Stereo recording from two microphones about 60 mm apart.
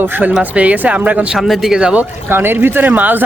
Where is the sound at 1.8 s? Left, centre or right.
Right.